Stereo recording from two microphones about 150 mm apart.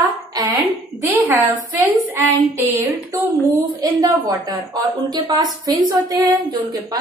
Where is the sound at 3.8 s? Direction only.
25° right (ahead or behind).